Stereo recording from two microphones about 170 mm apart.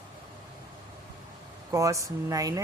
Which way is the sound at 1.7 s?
20° right (ahead or behind).